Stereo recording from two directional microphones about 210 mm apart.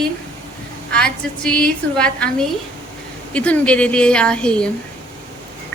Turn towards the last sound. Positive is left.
turn(degrees=5)  # may be behind; listen again after turning